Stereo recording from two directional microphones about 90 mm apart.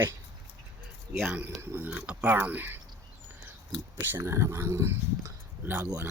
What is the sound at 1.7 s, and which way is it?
Speech, 20° right (ahead or behind).